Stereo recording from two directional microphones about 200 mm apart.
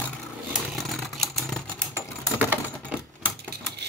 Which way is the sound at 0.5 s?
Centre (ahead or behind).